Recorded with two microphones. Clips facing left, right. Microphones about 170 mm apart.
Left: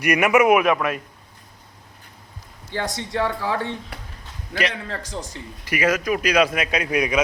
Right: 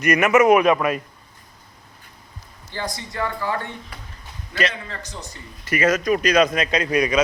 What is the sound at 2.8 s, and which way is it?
Speech, 80° left.